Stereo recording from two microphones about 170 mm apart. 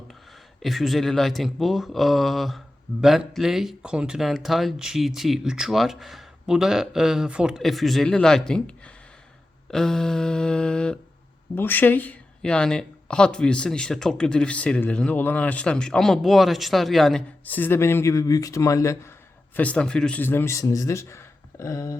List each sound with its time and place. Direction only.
0.6 s speech: centre (ahead or behind); by 19.1 s 20° left (ahead or behind)
19.5 s speech: 5° left (ahead or behind)